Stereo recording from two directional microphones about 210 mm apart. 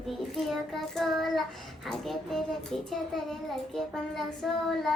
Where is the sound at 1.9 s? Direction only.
Centre (ahead or behind).